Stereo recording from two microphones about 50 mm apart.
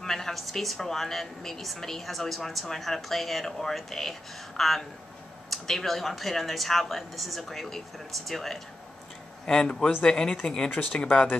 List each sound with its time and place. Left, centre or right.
0.0 s speech: centre
9.5 s a man's voice: centre